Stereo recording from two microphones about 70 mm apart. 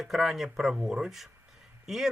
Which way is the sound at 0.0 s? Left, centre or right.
Centre.